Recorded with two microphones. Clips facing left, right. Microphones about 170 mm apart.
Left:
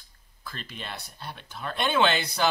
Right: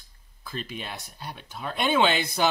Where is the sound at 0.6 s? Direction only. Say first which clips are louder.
Right 4 dB; 10° right (ahead or behind).